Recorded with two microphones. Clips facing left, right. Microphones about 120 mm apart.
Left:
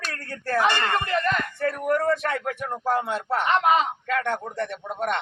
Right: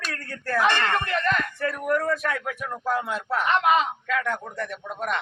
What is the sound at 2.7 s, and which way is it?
Speech, 30° left (ahead or behind).